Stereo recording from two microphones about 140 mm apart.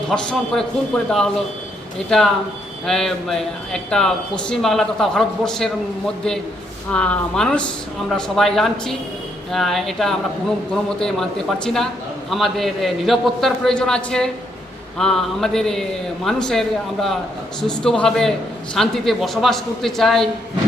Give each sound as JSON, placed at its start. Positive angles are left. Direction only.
{"t": 0.1, "sound": "a man's voice", "side_deg": 5}
{"t": 6.9, "sound": "a man's voice", "side_deg": 5}